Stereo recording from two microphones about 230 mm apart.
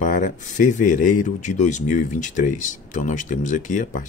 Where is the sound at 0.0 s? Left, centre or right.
Left.